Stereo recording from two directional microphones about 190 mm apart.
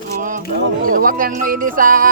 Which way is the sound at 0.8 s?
45° right (ahead or behind).